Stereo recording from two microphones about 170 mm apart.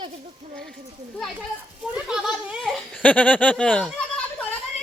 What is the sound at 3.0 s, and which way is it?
Speech, 10° left (ahead or behind).